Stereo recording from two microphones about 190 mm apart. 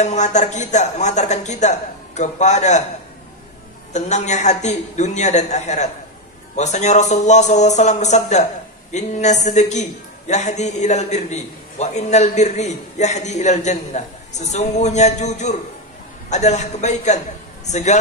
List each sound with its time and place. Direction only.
0.0 s a man's voice: 40° left (ahead or behind)
3.9 s a man's voice: 40° left (ahead or behind)